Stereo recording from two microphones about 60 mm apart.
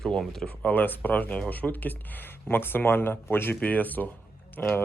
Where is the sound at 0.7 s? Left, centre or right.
Left.